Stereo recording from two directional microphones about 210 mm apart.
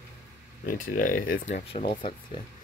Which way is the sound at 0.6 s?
40° left (ahead or behind).